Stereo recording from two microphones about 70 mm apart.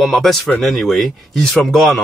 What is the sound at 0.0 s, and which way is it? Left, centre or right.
Speech, centre.